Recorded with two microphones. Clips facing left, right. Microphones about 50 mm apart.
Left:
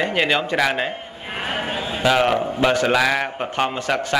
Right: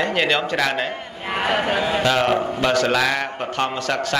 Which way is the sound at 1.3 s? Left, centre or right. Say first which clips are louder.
Right 5 dB; right.